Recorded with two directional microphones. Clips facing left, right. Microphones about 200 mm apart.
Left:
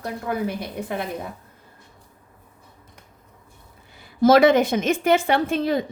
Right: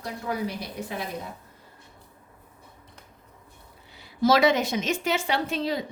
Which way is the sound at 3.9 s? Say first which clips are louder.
Left 6 dB; 50° left (ahead or behind).